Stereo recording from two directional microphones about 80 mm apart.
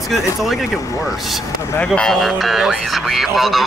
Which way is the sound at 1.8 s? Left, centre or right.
Centre.